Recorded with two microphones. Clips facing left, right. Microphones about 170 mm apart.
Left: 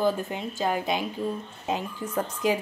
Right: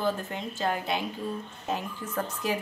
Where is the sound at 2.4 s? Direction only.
15° left (ahead or behind).